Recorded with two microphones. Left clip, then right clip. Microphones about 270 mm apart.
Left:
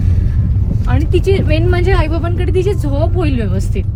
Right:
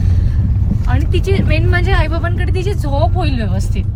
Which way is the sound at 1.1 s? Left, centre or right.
Centre.